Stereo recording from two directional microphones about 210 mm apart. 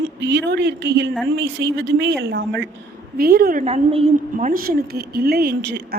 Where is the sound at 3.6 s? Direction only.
30° right (ahead or behind); by 5.9 s 50° right (ahead or behind).